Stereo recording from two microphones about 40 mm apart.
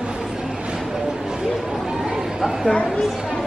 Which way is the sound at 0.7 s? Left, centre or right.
Centre.